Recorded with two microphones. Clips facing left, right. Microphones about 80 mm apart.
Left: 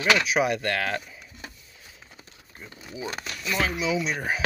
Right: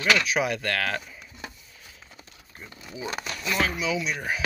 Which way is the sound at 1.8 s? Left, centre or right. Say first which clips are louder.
Left 1 dB; centre.